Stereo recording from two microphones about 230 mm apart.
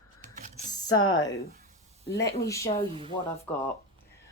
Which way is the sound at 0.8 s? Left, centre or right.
Left.